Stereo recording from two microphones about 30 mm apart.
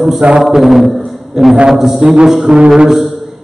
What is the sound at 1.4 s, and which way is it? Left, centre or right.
Brass instrument, right.